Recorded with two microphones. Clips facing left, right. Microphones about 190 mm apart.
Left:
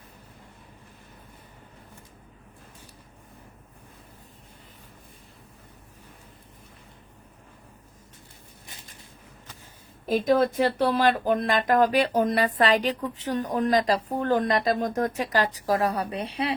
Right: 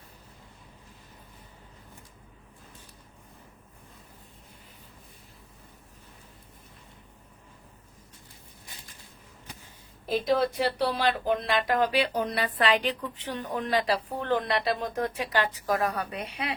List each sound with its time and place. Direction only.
10.1 s speech: 45° left (ahead or behind)